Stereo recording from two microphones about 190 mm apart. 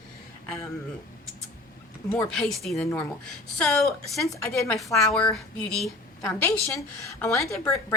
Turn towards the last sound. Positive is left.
turn(degrees=15)  # may be behind; listen again after turning